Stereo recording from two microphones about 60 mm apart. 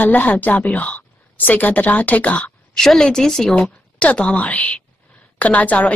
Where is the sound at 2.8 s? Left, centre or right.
Centre.